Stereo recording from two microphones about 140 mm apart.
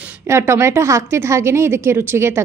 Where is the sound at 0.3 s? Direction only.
20° right (ahead or behind).